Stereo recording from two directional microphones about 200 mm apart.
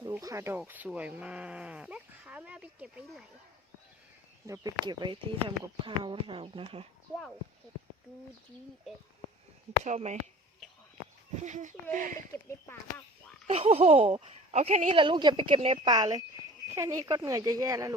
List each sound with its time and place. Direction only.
0.0 s speech: 15° right (ahead or behind)
4.4 s speech: 15° right (ahead or behind)
9.8 s speech: 35° right (ahead or behind)
11.4 s speech: 40° right (ahead or behind)
12.3 s speech: 15° left (ahead or behind)
13.5 s speech: 30° right (ahead or behind)
14.9 s speech: 25° right (ahead or behind)